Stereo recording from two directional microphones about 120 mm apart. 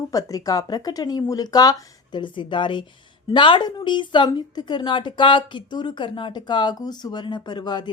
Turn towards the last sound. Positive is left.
turn(degrees=35)  # may be behind; listen again after turning